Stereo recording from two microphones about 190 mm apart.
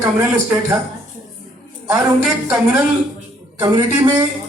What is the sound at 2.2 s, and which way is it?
Speech, 5° right (ahead or behind).